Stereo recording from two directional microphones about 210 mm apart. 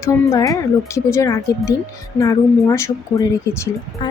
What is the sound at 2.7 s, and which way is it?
Speech, 15° left (ahead or behind).